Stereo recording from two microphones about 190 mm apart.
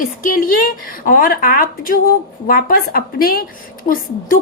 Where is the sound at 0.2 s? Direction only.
50° left (ahead or behind).